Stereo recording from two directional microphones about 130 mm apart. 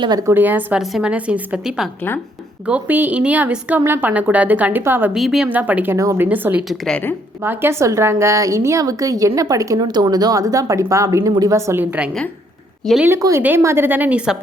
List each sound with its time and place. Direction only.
0.0 s a woman's voice: 30° right (ahead or behind)
5.1 s a woman's voice: centre (ahead or behind)
6.7 s a woman's voice: 5° left (ahead or behind)
7.4 s a woman's voice: 20° right (ahead or behind)
12.8 s speech: centre (ahead or behind)
13.1 s a woman's voice: 20° right (ahead or behind)